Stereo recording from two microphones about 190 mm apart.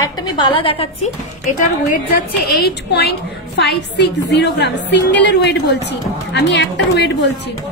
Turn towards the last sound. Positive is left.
turn(degrees=65)  # may be behind; listen again after turning